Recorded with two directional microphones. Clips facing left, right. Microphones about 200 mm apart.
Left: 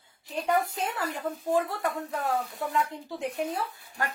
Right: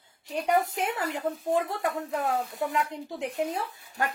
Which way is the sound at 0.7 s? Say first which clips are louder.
Right 2 dB; 20° right (ahead or behind).